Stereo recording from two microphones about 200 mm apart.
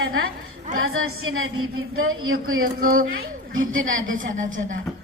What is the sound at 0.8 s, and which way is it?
A woman's voice, 90° right.